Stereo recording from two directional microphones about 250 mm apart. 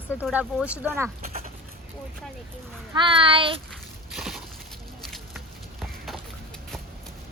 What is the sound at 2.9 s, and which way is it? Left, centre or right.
Speech, centre.